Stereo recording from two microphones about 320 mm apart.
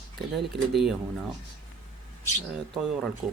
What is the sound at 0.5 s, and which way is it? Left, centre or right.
Speech, centre.